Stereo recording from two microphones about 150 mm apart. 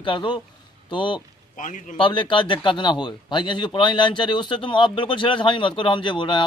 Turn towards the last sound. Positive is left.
turn(degrees=30)  # may be behind; listen again after turning